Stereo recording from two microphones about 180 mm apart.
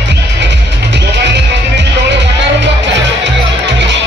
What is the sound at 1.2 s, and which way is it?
Music, 75° right (ahead or behind).